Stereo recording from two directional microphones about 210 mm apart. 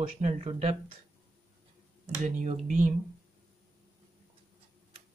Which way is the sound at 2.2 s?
35° right (ahead or behind).